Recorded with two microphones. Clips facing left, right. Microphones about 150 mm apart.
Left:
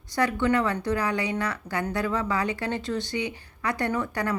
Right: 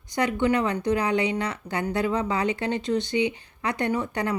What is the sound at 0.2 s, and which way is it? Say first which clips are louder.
Speech: right 1 dB; 20° right (ahead or behind).